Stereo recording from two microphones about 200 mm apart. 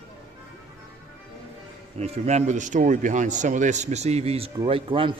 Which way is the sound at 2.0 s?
35° right (ahead or behind).